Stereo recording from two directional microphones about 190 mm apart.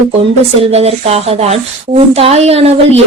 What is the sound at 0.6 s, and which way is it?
Speech, 35° right (ahead or behind).